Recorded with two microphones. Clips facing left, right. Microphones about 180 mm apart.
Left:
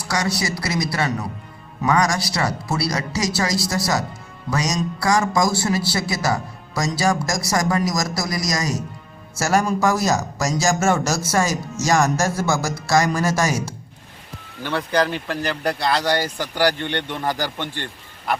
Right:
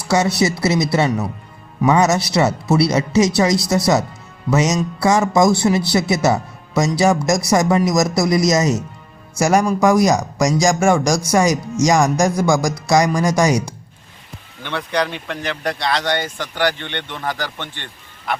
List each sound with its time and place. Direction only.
0.1 s speech: 25° right (ahead or behind)
14.6 s speech: 5° left (ahead or behind)